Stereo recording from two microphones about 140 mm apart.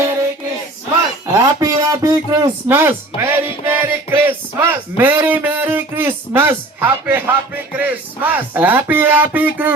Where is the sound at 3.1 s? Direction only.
40° left (ahead or behind).